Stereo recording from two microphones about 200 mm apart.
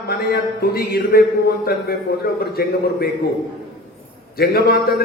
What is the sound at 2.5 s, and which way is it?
Speech, 50° left (ahead or behind).